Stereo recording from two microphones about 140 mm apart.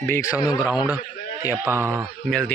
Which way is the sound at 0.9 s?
25° left (ahead or behind).